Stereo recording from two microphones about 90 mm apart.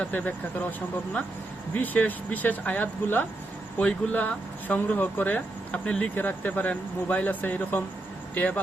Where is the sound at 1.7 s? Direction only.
20° left (ahead or behind).